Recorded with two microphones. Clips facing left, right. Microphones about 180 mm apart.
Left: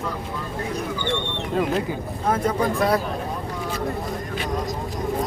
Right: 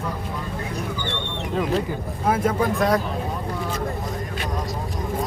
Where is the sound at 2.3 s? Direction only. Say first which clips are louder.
Right 1 dB; 5° right (ahead or behind).